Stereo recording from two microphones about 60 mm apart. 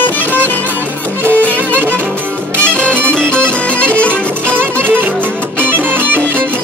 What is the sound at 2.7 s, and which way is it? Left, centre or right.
Music, left.